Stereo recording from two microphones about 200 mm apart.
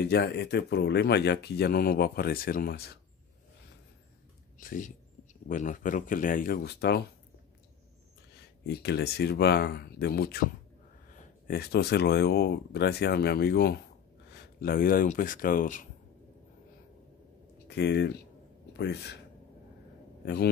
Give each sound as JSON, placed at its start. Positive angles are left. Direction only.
{"t": 0.0, "sound": "speech", "side_deg": 55}
{"t": 4.6, "sound": "speech", "side_deg": 40}
{"t": 8.6, "sound": "speech", "side_deg": 55}
{"t": 11.4, "sound": "speech", "side_deg": 50}
{"t": 17.6, "sound": "a man's voice", "side_deg": 55}
{"t": 20.2, "sound": "speech", "side_deg": 55}